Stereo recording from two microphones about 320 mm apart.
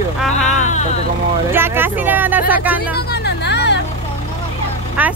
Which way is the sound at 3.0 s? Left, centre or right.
Left.